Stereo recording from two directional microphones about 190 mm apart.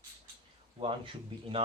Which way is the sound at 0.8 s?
30° right (ahead or behind).